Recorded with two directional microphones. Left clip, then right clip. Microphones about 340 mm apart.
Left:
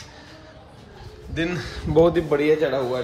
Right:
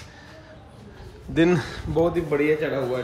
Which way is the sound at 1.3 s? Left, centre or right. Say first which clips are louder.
Right 6 dB; centre.